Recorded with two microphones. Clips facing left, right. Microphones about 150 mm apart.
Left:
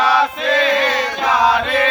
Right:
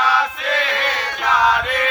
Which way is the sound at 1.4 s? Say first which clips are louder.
Left 3 dB; 35° left (ahead or behind).